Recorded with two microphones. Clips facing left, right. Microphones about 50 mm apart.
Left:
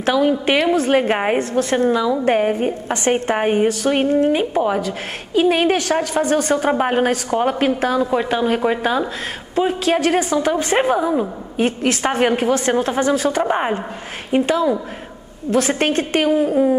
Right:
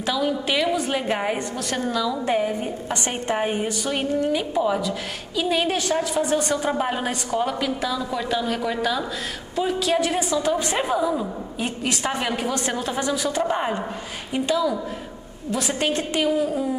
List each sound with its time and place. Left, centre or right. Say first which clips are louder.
0.0 s a woman's voice: left 7 dB; left
2.2 s a woman's voice: left 6 dB; left
6.1 s a woman's voice: left 5 dB; left
10.5 s a woman's voice: left 6 dB; left
13.4 s a woman's voice: left 4 dB; left